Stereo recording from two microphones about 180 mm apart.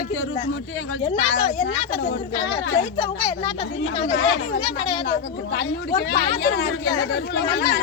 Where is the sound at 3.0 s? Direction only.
30° left (ahead or behind).